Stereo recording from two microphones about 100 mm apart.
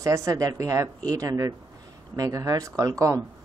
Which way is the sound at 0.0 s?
35° right (ahead or behind).